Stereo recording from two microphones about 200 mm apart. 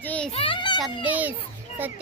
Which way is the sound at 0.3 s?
25° left (ahead or behind).